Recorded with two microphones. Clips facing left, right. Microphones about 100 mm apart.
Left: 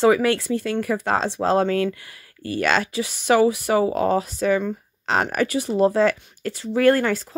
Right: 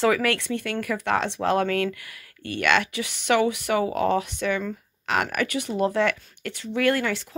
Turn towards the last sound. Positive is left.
turn(degrees=40)  # may be behind; listen again after turning